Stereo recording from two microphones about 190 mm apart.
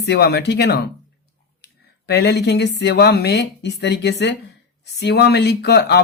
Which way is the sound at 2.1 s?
60° left (ahead or behind).